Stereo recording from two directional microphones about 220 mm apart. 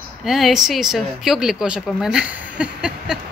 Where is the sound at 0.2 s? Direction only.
Centre (ahead or behind).